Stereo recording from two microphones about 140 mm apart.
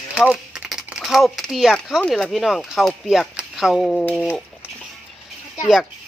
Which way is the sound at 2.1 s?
Centre (ahead or behind).